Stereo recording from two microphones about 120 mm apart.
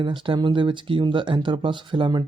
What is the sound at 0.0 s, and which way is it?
Speech, 40° right (ahead or behind).